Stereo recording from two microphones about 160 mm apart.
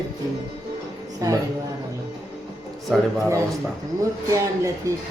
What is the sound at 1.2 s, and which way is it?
Speech, 20° right (ahead or behind).